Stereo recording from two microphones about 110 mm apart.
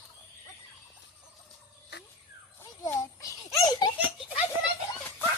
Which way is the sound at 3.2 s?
35° left (ahead or behind).